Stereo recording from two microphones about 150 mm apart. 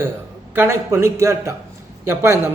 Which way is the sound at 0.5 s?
15° right (ahead or behind).